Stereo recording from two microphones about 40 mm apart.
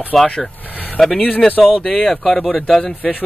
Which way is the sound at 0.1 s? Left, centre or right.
Centre.